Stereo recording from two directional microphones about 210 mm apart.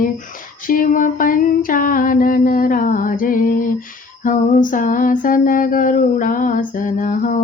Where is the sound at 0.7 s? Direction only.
40° left (ahead or behind).